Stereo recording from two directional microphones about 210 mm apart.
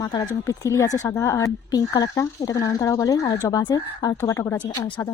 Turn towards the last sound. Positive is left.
turn(degrees=15)  # may be behind; listen again after turning